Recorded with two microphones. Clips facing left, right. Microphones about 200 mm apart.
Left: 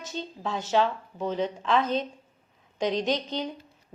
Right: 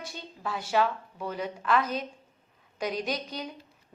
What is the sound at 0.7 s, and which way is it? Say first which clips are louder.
A woman's voice: left 2 dB; 25° left (ahead or behind).